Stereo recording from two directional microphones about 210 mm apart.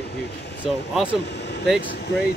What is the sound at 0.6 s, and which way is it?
Speech, 5° right (ahead or behind).